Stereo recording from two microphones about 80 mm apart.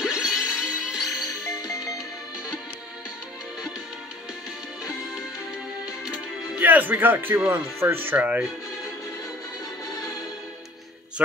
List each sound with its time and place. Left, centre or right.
0.0 s music: centre
1.6 s music: left
6.0 s music: centre
6.6 s speech: right